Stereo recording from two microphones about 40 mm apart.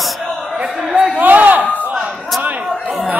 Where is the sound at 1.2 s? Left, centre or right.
Right.